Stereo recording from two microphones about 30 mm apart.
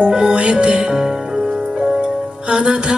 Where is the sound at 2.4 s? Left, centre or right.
Right.